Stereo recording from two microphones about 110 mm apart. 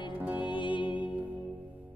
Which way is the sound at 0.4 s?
50° left (ahead or behind).